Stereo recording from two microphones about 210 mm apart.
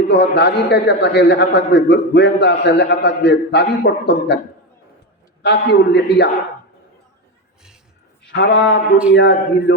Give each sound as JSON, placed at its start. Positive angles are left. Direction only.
{"t": 0.1, "sound": "a man's voice", "side_deg": 55}
{"t": 5.4, "sound": "a man's voice", "side_deg": 55}
{"t": 8.3, "sound": "a man's voice", "side_deg": 55}